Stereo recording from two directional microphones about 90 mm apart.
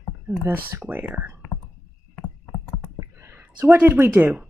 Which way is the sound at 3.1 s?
25° right (ahead or behind).